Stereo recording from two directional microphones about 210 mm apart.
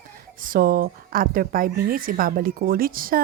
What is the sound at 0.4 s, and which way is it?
A woman's voice, 40° right (ahead or behind).